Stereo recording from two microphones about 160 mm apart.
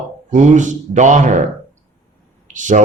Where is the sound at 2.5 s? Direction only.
50° right (ahead or behind).